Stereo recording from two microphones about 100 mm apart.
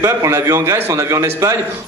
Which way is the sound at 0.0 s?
30° right (ahead or behind).